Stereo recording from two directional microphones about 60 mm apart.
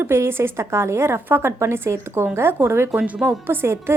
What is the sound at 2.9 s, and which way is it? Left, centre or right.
Speech, centre.